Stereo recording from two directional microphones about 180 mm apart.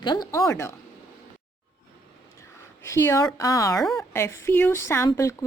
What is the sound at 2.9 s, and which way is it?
Speech, 15° left (ahead or behind).